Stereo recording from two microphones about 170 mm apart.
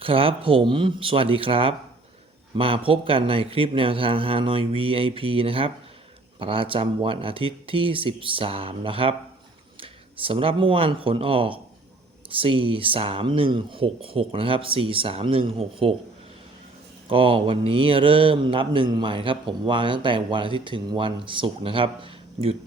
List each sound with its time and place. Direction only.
0.0 s speech: 30° right (ahead or behind)
17.1 s speech: 30° right (ahead or behind)